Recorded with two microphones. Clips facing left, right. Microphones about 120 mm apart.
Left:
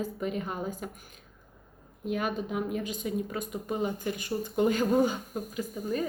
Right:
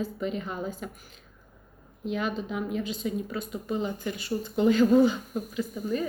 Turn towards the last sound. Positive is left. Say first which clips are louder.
# right 2 dB
turn(degrees=40)  # may be behind; listen again after turning